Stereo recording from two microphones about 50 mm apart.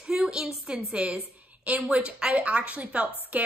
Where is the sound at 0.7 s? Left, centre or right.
Right.